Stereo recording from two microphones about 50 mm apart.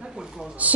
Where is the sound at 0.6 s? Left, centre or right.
Right.